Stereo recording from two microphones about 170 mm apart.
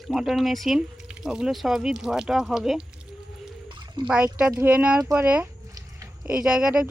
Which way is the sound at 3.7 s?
30° right (ahead or behind).